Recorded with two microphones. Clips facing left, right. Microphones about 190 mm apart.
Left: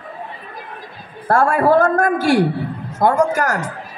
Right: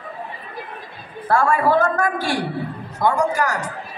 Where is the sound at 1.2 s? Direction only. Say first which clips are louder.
Left 3 dB; 45° left (ahead or behind).